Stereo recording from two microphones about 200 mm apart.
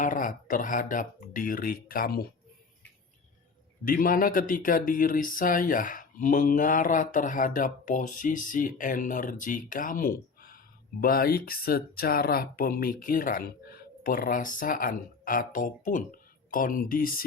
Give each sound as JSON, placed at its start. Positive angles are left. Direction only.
{"t": 0.0, "sound": "speech", "side_deg": 40}
{"t": 3.8, "sound": "speech", "side_deg": 45}